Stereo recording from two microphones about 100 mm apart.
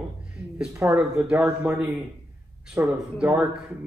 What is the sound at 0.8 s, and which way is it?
Speech, 10° right (ahead or behind).